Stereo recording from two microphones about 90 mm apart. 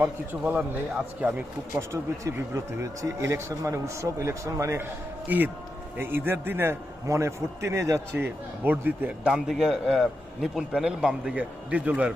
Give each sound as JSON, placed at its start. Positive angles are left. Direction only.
{"t": 0.0, "sound": "a man's voice", "side_deg": -20}
{"t": 2.2, "sound": "speech", "side_deg": -35}
{"t": 5.3, "sound": "a man's voice", "side_deg": -20}
{"t": 8.1, "sound": "a man's voice", "side_deg": -20}
{"t": 11.3, "sound": "a man's voice", "side_deg": -15}